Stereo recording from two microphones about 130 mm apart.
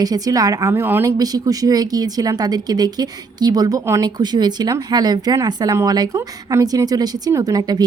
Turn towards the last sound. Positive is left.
turn(degrees=-25)  # may be behind; listen again after turning